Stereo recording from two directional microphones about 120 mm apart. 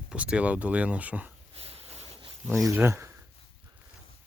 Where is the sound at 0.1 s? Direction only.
10° right (ahead or behind).